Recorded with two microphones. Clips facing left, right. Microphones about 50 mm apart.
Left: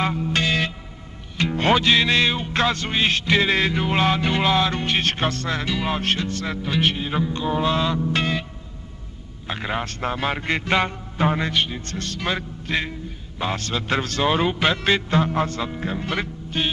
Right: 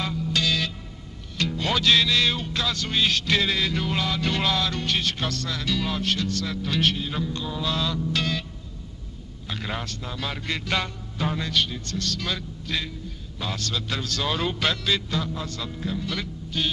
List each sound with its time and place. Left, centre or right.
0.0 s music: left
1.8 s music: left
2.5 s a man's voice: left
3.7 s music: left
5.0 s a man's voice: left
6.7 s music: left
9.5 s music: left
9.8 s a man's voice: left
14.8 s a man's voice: left